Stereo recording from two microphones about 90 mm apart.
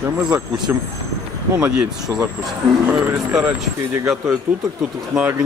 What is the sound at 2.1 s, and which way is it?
Speech, 40° right (ahead or behind).